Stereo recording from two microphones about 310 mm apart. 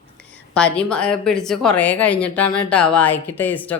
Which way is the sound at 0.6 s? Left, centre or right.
Centre.